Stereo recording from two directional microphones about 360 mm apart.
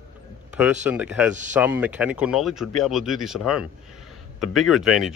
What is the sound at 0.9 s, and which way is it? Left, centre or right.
Speech, centre.